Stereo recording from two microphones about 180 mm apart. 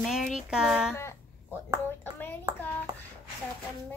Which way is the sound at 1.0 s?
15° left (ahead or behind).